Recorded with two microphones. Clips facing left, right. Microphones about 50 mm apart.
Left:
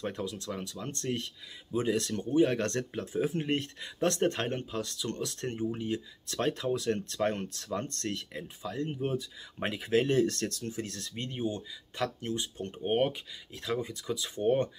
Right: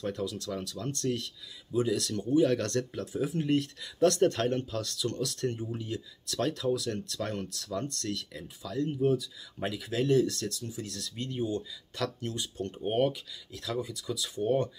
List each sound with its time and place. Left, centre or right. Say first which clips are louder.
0.0 s speech: right 2 dB; left